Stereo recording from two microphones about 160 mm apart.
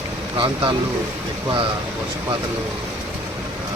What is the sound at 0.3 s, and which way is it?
Speech, 30° right (ahead or behind).